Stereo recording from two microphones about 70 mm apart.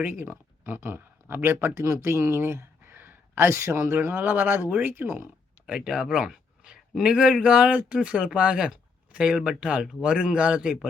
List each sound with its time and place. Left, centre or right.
0.0 s speech: right
5.6 s speech: centre